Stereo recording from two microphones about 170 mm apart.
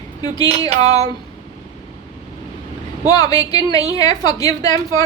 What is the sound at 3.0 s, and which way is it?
A woman's voice, 20° left (ahead or behind).